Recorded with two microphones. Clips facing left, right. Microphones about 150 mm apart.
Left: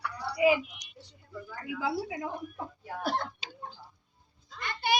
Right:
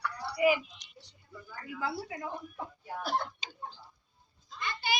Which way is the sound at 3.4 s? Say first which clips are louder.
Left 1 dB; 5° left (ahead or behind).